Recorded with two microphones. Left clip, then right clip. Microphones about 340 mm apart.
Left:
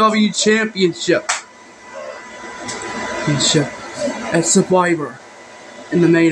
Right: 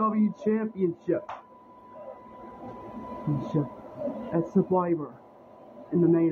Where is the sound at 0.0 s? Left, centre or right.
Right.